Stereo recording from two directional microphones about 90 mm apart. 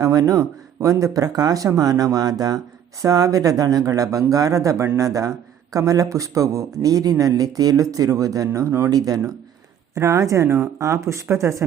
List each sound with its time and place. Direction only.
0.0 s speech: 40° right (ahead or behind)
8.9 s speech: 45° right (ahead or behind)